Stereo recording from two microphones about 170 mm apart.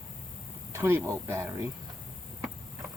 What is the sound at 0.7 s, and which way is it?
Speech, 15° right (ahead or behind).